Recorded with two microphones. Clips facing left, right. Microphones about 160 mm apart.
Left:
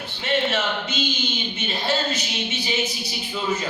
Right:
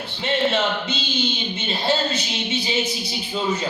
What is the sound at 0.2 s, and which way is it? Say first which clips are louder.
Speech: right 2 dB; 30° right (ahead or behind).